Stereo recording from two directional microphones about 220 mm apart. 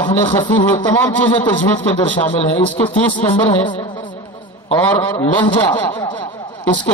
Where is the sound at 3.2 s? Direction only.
10° left (ahead or behind).